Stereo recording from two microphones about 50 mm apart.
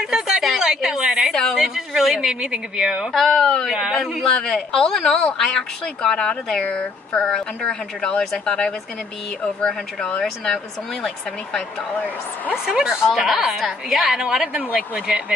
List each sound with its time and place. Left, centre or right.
0.1 s a sound: centre
1.6 s speech: centre
3.1 s speech: centre
3.7 s speech: centre
4.3 s speech: centre
10.2 s speech: centre
12.6 s a woman's voice: centre
14.2 s speech: right